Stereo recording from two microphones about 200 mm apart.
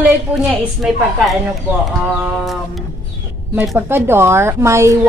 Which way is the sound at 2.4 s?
Centre (ahead or behind).